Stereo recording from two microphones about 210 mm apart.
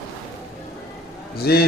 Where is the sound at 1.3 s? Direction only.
50° left (ahead or behind).